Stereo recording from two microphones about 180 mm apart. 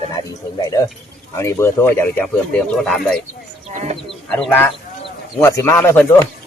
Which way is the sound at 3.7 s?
40° right (ahead or behind).